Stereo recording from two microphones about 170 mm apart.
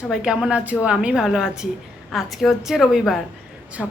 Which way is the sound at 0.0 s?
5° right (ahead or behind).